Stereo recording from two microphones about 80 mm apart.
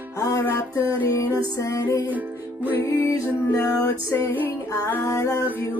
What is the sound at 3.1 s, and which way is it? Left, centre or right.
Music, left.